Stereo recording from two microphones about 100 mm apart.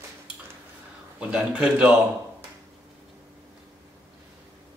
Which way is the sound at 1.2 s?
10° right (ahead or behind).